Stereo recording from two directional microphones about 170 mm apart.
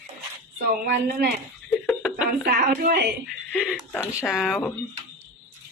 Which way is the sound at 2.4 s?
80° right.